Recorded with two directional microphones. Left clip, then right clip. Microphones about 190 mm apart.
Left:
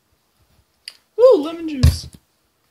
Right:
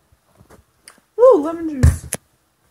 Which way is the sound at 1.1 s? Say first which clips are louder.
Right 1 dB; centre (ahead or behind).